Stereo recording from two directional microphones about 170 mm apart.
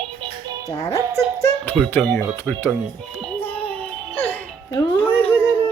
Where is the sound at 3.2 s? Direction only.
10° left (ahead or behind).